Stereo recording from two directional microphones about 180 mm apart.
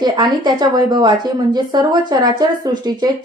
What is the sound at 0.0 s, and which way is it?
A woman's voice, 25° right (ahead or behind).